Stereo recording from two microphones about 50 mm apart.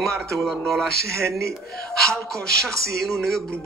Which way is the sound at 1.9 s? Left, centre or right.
Centre.